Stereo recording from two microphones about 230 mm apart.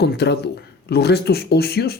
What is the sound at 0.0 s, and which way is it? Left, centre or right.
Speech, left.